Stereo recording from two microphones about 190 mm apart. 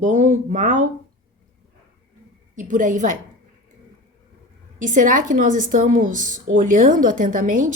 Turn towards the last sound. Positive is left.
turn(degrees=-45)  # may be behind; listen again after turning